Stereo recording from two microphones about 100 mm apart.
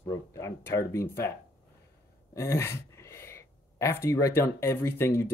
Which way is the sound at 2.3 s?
25° left (ahead or behind).